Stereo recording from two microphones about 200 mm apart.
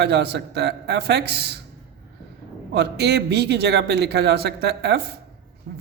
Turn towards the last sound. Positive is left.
turn(degrees=-50)  # may be behind; listen again after turning